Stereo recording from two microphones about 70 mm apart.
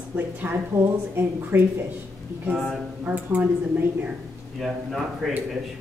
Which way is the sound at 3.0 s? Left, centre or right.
Right.